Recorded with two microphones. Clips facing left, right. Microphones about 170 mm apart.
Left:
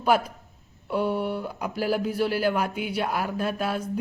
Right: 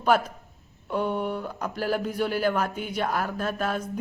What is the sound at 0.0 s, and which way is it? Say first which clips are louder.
Speech: even; 10° left (ahead or behind).